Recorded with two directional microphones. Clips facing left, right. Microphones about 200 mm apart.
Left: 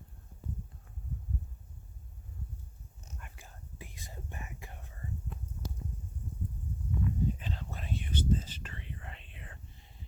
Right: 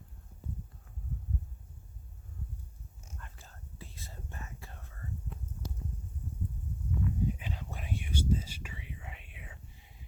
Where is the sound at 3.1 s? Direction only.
10° left (ahead or behind).